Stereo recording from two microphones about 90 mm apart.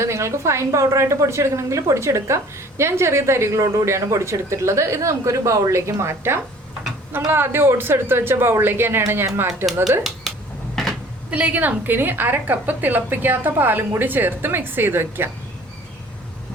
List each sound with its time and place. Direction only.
0.0 s a woman's voice: 35° right (ahead or behind)
11.3 s a woman's voice: 15° right (ahead or behind)